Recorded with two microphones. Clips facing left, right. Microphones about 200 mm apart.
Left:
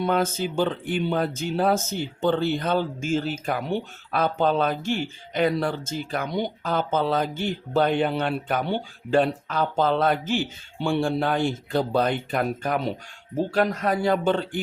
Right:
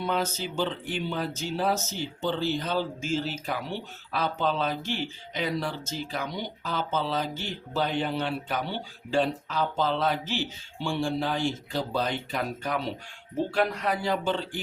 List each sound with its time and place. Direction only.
0.0 s speech: 50° left (ahead or behind)